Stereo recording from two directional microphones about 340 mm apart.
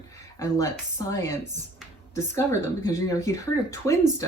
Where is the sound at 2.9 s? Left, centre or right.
Centre.